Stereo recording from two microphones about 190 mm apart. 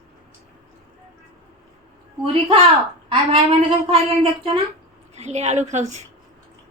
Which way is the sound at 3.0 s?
30° right (ahead or behind).